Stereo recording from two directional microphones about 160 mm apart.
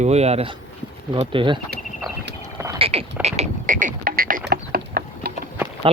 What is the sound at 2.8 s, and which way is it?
Frog, 35° right (ahead or behind).